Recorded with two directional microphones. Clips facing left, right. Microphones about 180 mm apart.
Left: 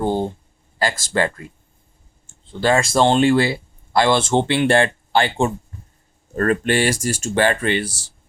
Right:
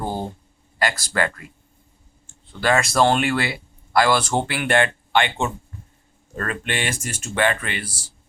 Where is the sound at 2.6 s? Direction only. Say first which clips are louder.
Left 2 dB; 25° left (ahead or behind).